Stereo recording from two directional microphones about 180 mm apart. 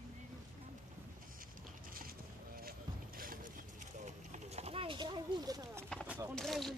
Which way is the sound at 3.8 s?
40° right (ahead or behind).